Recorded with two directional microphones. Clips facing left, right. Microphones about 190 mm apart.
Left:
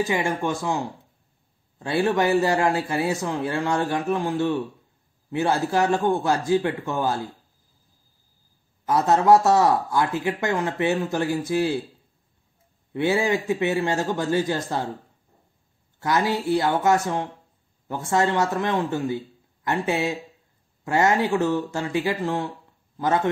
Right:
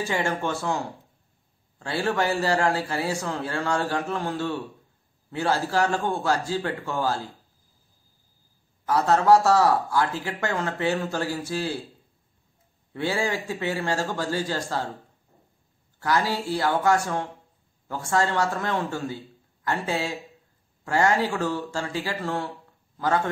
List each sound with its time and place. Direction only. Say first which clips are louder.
0.0 s speech: left 3 dB; 15° left (ahead or behind)
8.8 s speech: left 2 dB; 20° left (ahead or behind)
12.9 s speech: left 5 dB; 20° left (ahead or behind)
16.0 s a man's voice: left 2 dB; 20° left (ahead or behind)